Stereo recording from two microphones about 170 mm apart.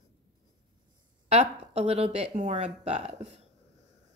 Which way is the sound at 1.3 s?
35° right (ahead or behind).